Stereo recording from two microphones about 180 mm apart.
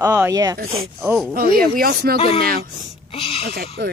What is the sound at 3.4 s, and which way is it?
Speech, 65° right (ahead or behind).